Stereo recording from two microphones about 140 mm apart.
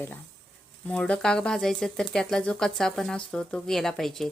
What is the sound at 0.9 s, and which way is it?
Speech, 10° left (ahead or behind).